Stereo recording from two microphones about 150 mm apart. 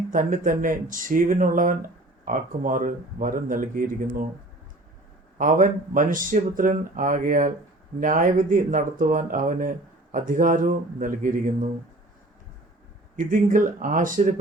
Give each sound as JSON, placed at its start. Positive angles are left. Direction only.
{"t": 0.1, "sound": "speech", "side_deg": -60}
{"t": 5.4, "sound": "speech", "side_deg": -65}
{"t": 13.1, "sound": "speech", "side_deg": -65}